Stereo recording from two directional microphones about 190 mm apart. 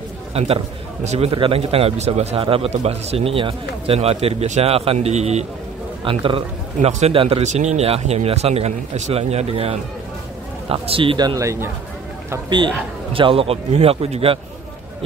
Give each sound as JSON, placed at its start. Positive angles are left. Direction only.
{"t": 0.3, "sound": "a man's voice", "side_deg": -30}
{"t": 13.1, "sound": "speech", "side_deg": -30}